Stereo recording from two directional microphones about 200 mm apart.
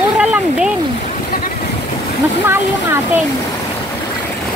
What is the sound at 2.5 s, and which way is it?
Speech, 10° right (ahead or behind).